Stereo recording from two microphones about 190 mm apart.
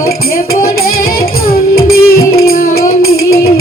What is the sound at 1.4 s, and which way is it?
Music, 50° left (ahead or behind).